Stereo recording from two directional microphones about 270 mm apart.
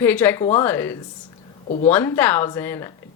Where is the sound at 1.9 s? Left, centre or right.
Centre.